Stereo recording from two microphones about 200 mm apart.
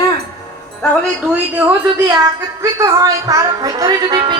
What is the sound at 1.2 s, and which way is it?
A woman's voice, 10° right (ahead or behind).